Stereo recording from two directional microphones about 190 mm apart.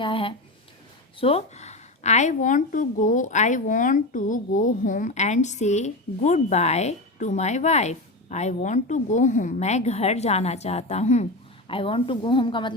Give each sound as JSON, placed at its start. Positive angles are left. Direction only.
{"t": 0.0, "sound": "a woman's voice", "side_deg": 30}